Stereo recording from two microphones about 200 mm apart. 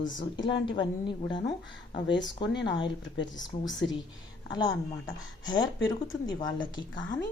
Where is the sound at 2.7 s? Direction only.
65° left (ahead or behind).